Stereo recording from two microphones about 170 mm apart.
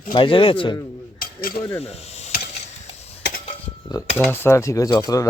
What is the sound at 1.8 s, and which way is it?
Sizzle, 40° left (ahead or behind).